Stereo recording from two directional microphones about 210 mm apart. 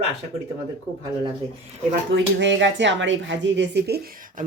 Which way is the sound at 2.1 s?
55° right (ahead or behind).